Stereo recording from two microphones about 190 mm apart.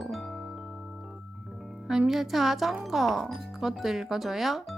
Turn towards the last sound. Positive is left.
turn(degrees=0)  # may be behind; listen again after turning